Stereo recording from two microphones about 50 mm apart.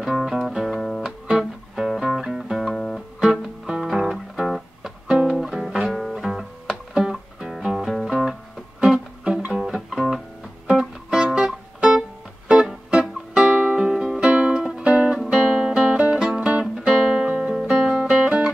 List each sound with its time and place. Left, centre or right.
0.0 s music: centre
3.2 s music: centre
6.9 s music: centre
9.5 s music: centre
10.7 s music: centre
17.3 s music: right